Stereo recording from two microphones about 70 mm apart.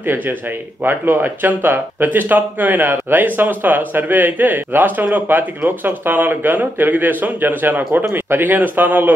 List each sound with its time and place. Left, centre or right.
0.8 s speech: right